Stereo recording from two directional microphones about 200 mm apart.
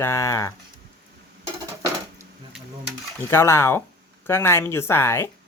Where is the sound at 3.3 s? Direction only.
10° left (ahead or behind).